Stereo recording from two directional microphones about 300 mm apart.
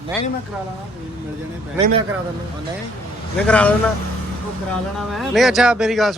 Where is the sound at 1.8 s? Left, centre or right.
Centre.